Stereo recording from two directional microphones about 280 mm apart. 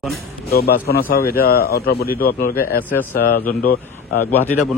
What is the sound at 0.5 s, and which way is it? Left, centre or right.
Speech, left.